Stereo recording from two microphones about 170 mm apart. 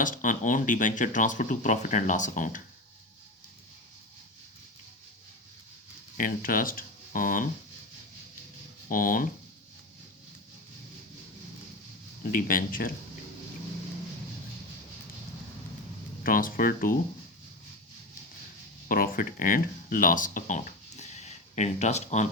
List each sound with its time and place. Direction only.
0.0 s speech: 50° left (ahead or behind)
6.1 s speech: 55° left (ahead or behind)
8.9 s speech: 55° left (ahead or behind)
12.3 s speech: 55° left (ahead or behind)
16.2 s speech: 55° left (ahead or behind)
18.9 s speech: 55° left (ahead or behind)